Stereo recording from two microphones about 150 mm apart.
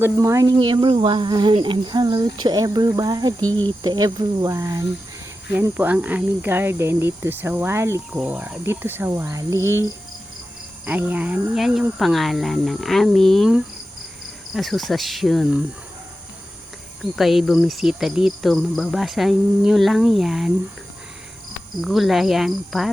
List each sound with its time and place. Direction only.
0.0 s speech: 20° right (ahead or behind)
3.4 s speech: 10° left (ahead or behind)
3.8 s speech: 30° right (ahead or behind)
10.8 s cricket: 10° right (ahead or behind)
17.0 s cricket: centre (ahead or behind)
21.8 s cricket: centre (ahead or behind)